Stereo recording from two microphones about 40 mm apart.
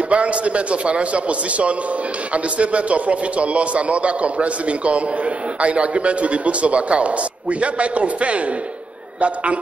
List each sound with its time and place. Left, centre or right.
0.1 s a man's voice: right